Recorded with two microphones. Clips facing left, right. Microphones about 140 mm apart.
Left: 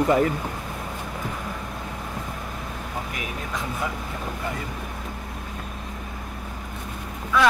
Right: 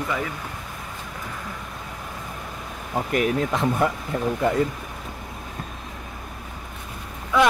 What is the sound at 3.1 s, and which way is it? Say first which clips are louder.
Speech: right 10 dB; 55° right (ahead or behind).